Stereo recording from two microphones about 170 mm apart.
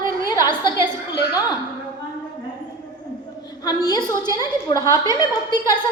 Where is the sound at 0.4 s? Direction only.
25° left (ahead or behind).